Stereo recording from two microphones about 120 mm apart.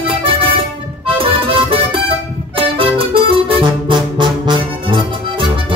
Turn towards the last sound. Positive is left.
turn(degrees=-40)  # may be behind; listen again after turning